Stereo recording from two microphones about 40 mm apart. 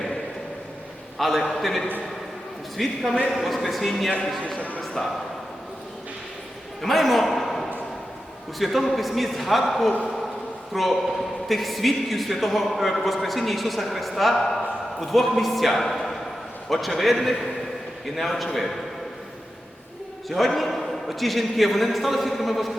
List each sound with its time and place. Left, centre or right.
1.2 s a man's voice: centre
4.4 s a man's voice: left
6.8 s a sound: centre
8.5 s a man's voice: centre
20.3 s a man's voice: centre